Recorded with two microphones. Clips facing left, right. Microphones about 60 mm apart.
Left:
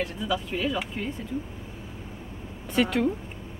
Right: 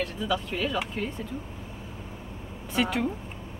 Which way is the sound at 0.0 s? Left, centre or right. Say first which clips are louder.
Even; centre.